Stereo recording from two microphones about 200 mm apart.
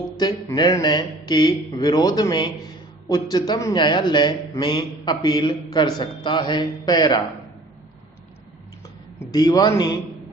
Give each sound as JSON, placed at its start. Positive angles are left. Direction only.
{"t": 0.2, "sound": "a man's voice", "side_deg": 20}
{"t": 9.1, "sound": "a man's voice", "side_deg": 20}